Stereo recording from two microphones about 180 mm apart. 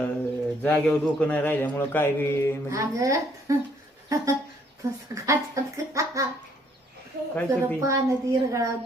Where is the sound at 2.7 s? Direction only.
15° right (ahead or behind).